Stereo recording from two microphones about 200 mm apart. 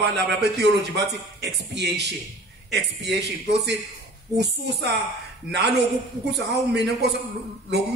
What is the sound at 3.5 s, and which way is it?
Speech, 55° right (ahead or behind).